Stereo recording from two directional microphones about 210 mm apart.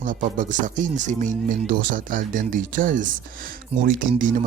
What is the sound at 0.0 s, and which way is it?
A man's voice, 40° right (ahead or behind).